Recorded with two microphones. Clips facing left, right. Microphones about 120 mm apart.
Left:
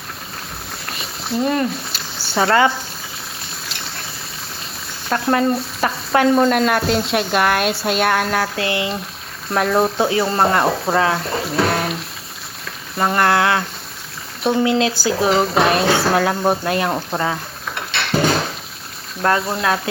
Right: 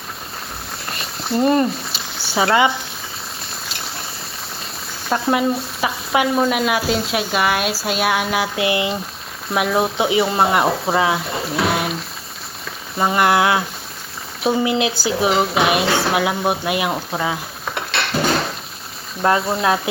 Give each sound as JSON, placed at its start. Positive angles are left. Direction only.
{"t": 0.9, "sound": "a sound", "side_deg": 0}
{"t": 5.0, "sound": "stir", "side_deg": -5}
{"t": 6.1, "sound": "speech", "side_deg": -5}
{"t": 9.5, "sound": "speech", "side_deg": -5}
{"t": 13.0, "sound": "a sound", "side_deg": -5}
{"t": 14.6, "sound": "speech", "side_deg": -20}
{"t": 15.2, "sound": "speech", "side_deg": 0}
{"t": 17.9, "sound": "a sound", "side_deg": 0}
{"t": 19.2, "sound": "speech", "side_deg": -5}